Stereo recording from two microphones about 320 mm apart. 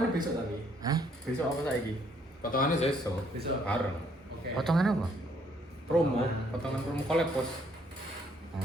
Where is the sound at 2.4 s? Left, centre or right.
Left.